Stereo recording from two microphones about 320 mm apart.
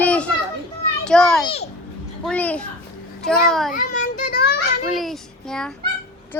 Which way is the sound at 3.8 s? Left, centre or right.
Left.